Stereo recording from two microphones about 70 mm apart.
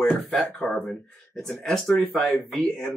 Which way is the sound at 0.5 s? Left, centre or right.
Left.